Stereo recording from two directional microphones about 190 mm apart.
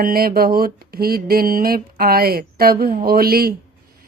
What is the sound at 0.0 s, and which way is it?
Speech, 50° right (ahead or behind).